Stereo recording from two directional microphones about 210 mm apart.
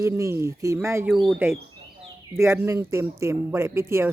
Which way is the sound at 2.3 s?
10° right (ahead or behind).